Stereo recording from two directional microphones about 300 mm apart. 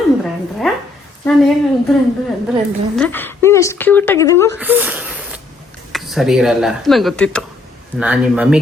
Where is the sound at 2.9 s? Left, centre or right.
Centre.